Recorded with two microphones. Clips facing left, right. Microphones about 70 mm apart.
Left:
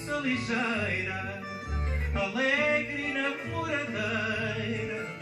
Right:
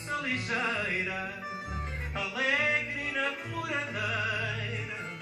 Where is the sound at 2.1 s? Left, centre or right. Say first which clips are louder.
Left 3 dB; centre.